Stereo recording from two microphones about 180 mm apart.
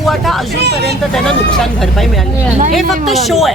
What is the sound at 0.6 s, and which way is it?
Speech, 65° right (ahead or behind).